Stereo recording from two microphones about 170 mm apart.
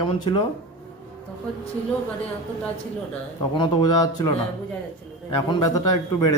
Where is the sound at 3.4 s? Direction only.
25° left (ahead or behind).